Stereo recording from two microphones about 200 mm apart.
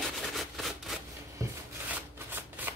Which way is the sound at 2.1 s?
10° right (ahead or behind).